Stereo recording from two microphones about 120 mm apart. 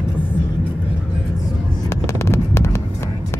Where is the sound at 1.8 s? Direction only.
25° left (ahead or behind).